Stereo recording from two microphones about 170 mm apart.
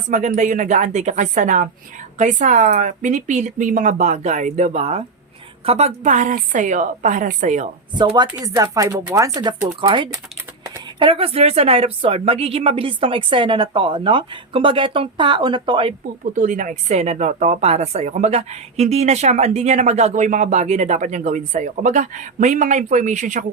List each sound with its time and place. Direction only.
0.1 s speech: 45° right (ahead or behind)
7.9 s speech: 25° right (ahead or behind)
16.3 s speech: 50° right (ahead or behind)